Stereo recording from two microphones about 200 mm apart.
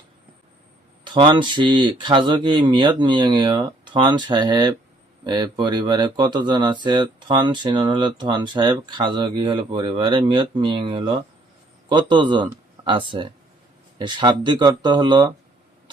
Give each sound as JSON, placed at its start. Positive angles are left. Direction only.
{"t": 1.0, "sound": "speech", "side_deg": -25}